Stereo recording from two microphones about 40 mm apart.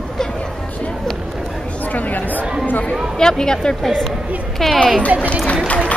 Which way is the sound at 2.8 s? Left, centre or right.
Centre.